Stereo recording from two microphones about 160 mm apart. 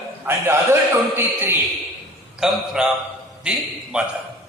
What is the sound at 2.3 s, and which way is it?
A man's voice, 5° right (ahead or behind).